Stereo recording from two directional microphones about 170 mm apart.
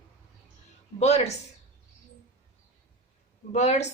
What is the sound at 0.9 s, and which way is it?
Speech, 40° left (ahead or behind).